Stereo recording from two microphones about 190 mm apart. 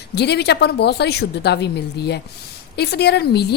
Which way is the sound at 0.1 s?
60° left (ahead or behind).